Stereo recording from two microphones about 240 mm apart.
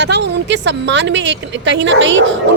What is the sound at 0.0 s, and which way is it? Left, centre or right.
Speech, right.